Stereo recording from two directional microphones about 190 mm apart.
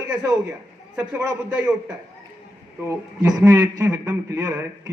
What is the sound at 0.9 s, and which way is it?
Speech, 10° right (ahead or behind).